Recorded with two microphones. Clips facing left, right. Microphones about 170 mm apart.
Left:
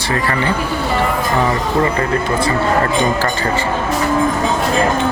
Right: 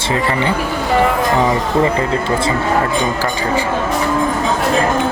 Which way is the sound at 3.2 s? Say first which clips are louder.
Even; 15° right (ahead or behind).